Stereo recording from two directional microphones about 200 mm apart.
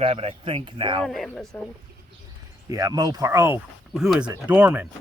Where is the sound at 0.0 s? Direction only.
30° right (ahead or behind).